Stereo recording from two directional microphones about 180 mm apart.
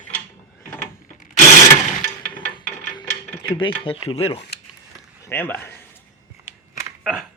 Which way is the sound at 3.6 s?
25° left (ahead or behind).